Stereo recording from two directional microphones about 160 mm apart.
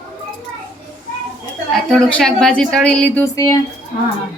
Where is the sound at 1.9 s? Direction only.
5° left (ahead or behind).